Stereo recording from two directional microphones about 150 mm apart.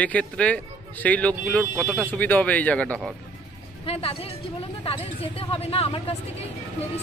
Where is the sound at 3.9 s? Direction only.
40° left (ahead or behind).